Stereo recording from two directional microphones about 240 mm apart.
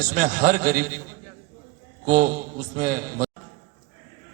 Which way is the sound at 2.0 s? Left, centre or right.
Right.